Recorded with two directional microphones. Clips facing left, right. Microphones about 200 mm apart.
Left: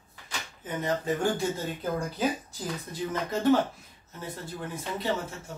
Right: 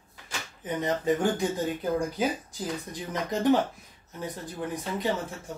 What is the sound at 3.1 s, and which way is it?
Speech, 15° right (ahead or behind).